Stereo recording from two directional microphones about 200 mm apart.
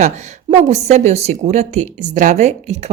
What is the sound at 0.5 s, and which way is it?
Speech, 35° right (ahead or behind).